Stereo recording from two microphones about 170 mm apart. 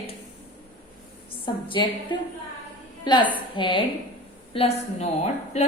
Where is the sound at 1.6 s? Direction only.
30° left (ahead or behind).